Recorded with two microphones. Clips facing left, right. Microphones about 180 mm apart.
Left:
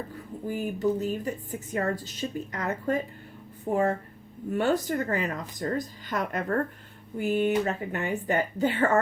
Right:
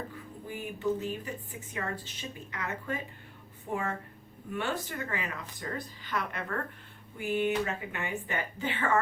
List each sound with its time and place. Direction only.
0.4 s a woman's voice: 40° left (ahead or behind)